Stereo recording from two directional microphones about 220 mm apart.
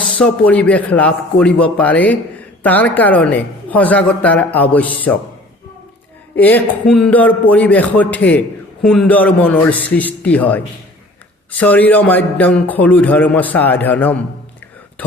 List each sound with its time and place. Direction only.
0.2 s a man's voice: 5° left (ahead or behind)
6.3 s a man's voice: 10° left (ahead or behind)